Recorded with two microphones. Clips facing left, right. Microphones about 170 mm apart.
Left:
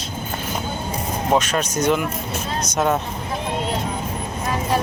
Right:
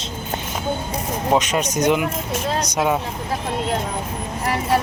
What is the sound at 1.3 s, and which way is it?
Speech, 20° right (ahead or behind).